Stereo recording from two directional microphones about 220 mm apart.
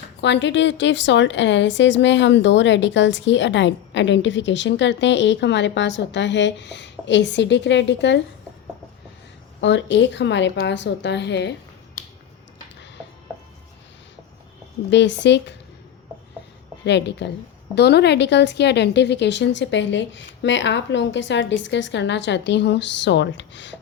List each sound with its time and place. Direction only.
0.2 s a woman's voice: 55° left (ahead or behind)
9.6 s a woman's voice: 55° left (ahead or behind)
14.8 s a woman's voice: 55° left (ahead or behind)
16.8 s a woman's voice: 50° left (ahead or behind)